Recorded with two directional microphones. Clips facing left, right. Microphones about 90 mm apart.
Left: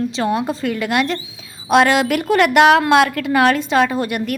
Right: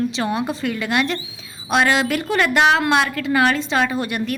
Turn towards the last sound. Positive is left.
turn(degrees=55)  # may be behind; listen again after turning